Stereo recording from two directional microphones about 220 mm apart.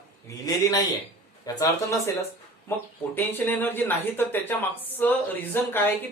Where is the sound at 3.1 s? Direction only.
10° left (ahead or behind).